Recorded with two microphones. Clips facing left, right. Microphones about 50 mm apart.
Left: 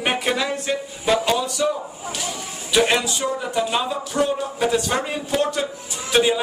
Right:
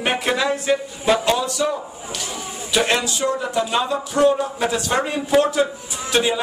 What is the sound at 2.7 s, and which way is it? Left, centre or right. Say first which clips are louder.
Speech: left 1 dB; centre.